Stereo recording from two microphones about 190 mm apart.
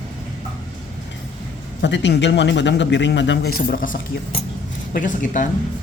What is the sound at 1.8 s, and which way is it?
A man's voice, 70° left (ahead or behind).